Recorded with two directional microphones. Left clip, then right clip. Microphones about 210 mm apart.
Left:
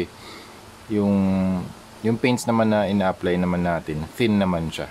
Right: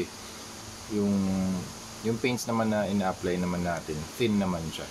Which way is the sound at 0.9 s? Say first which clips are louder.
Left 7 dB; 40° left (ahead or behind).